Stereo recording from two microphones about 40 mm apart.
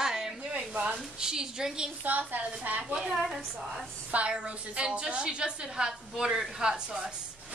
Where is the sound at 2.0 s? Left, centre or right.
Right.